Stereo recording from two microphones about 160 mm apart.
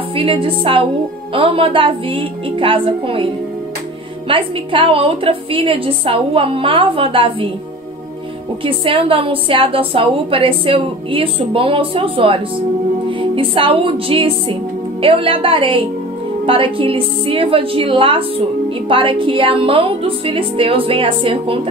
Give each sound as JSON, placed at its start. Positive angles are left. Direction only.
{"t": 0.1, "sound": "a woman's voice", "side_deg": -35}
{"t": 4.3, "sound": "a woman's voice", "side_deg": -35}
{"t": 8.6, "sound": "a woman's voice", "side_deg": -35}